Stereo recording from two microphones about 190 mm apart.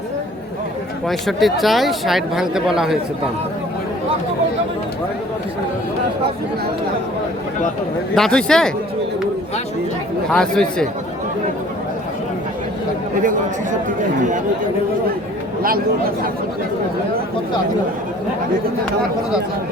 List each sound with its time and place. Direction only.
1.0 s speech: centre (ahead or behind)
8.1 s speech: 5° left (ahead or behind)
10.2 s speech: 5° left (ahead or behind)
14.2 s speech: 40° right (ahead or behind)
15.6 s speech: 50° right (ahead or behind)